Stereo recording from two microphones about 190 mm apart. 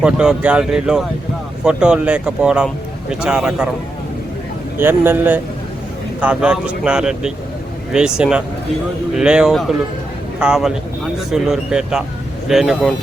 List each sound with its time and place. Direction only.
0.0 s speech: 5° right (ahead or behind)
4.8 s speech: 10° right (ahead or behind)